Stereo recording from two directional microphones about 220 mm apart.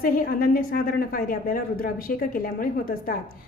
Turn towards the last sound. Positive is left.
turn(degrees=40)  # may be behind; listen again after turning